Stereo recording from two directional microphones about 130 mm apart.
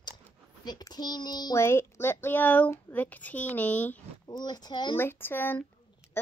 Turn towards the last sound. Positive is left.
turn(degrees=15)  # may be behind; listen again after turning